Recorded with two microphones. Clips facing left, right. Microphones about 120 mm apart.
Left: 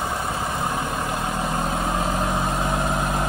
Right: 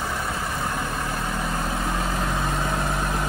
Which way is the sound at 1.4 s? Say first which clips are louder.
Left 3 dB; 25° left (ahead or behind).